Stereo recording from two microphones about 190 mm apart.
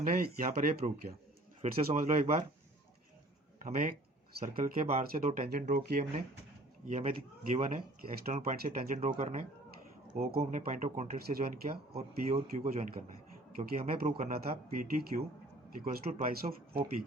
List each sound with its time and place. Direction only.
0.0 s speech: 45° right (ahead or behind)
3.6 s speech: 45° right (ahead or behind)
11.9 s speech: 35° right (ahead or behind)
13.6 s speech: 50° right (ahead or behind)
15.1 s speech: 35° right (ahead or behind)
15.7 s speech: 50° right (ahead or behind)